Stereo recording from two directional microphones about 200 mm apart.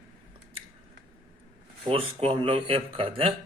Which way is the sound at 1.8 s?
25° right (ahead or behind).